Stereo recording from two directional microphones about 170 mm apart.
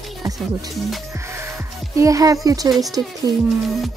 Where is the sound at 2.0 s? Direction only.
20° right (ahead or behind).